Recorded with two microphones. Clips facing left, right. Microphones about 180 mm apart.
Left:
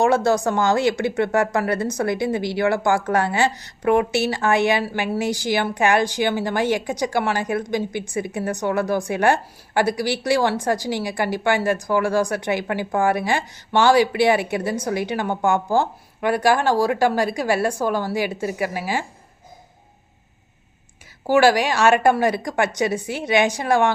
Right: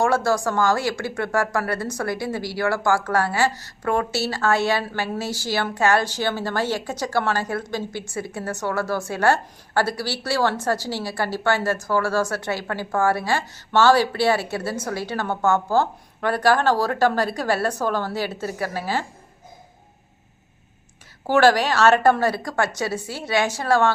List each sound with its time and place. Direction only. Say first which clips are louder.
0.0 s speech: left 3 dB; 20° left (ahead or behind)
21.2 s speech: left 1 dB; 10° left (ahead or behind)